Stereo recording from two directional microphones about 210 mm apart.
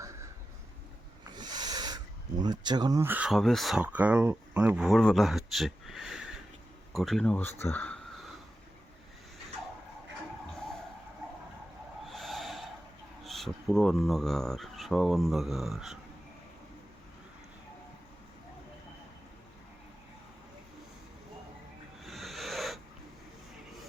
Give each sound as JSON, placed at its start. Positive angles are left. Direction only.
{"t": 0.0, "sound": "a sound", "side_deg": -15}
{"t": 1.4, "sound": "owl", "side_deg": -20}
{"t": 2.4, "sound": "speech", "side_deg": -20}
{"t": 12.0, "sound": "snort", "side_deg": 0}
{"t": 13.2, "sound": "speech", "side_deg": 0}
{"t": 22.0, "sound": "owl", "side_deg": 0}